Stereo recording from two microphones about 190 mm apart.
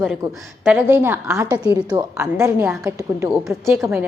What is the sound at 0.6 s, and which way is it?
A woman's voice, 10° right (ahead or behind).